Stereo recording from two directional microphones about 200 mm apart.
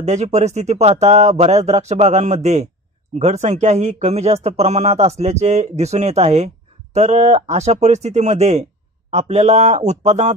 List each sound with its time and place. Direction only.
0.0 s speech: 35° right (ahead or behind)